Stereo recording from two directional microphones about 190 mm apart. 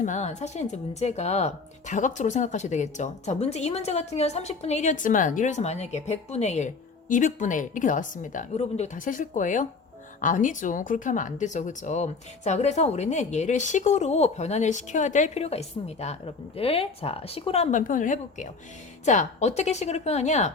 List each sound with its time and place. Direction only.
0.0 s a woman's voice: 40° left (ahead or behind)